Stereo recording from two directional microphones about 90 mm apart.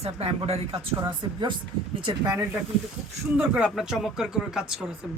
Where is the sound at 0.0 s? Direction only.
90° right.